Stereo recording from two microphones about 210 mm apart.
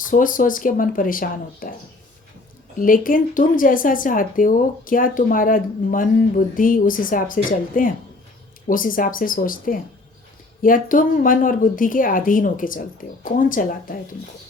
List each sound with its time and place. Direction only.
0.0 s speech: 40° left (ahead or behind)
2.7 s speech: 40° left (ahead or behind)